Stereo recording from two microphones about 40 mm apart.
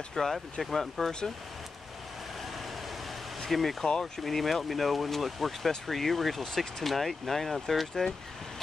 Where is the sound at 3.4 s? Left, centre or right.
Centre.